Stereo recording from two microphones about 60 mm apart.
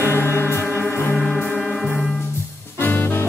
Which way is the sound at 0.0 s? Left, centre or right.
Left.